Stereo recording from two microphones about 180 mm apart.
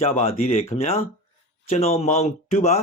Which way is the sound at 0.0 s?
35° left (ahead or behind).